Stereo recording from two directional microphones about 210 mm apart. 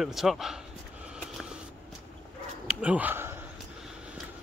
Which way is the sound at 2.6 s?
5° right (ahead or behind).